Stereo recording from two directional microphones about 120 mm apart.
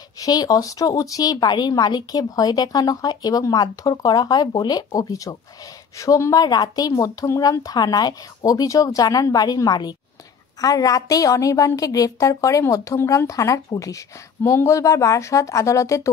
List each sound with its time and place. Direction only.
0.2 s a woman's voice: 30° left (ahead or behind)